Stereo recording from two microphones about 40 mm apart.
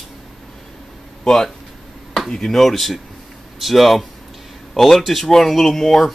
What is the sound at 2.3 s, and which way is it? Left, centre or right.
Speech, centre.